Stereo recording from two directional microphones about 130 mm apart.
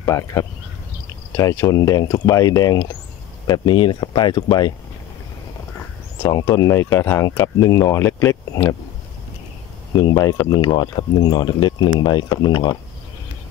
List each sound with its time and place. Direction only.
0.0 s speech: 25° left (ahead or behind)
6.2 s speech: 25° left (ahead or behind)
9.9 s speech: 30° left (ahead or behind)